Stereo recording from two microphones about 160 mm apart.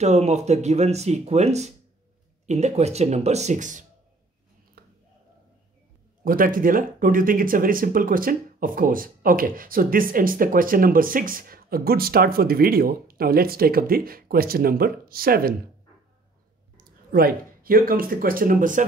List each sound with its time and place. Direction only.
0.0 s speech: 45° right (ahead or behind)
4.8 s a sound: 70° right (ahead or behind)
6.2 s speech: 60° right (ahead or behind)
16.7 s speech: 65° right (ahead or behind)